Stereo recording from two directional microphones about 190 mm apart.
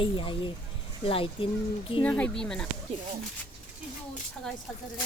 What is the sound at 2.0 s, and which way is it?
Speech, 5° left (ahead or behind).